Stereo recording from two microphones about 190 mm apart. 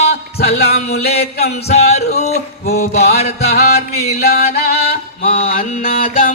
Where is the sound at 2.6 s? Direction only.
55° left (ahead or behind).